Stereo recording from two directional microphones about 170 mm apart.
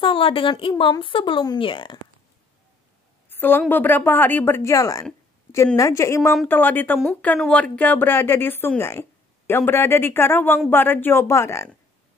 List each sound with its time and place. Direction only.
0.0 s speech: 30° left (ahead or behind)
3.3 s a woman's voice: 10° left (ahead or behind)